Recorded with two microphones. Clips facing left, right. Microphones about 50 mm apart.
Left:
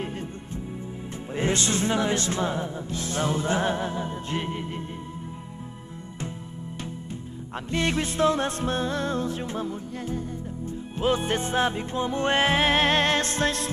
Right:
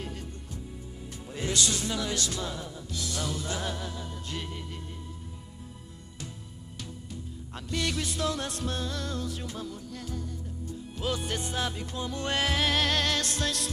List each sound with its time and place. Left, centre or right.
1.3 s music: left
7.5 s music: left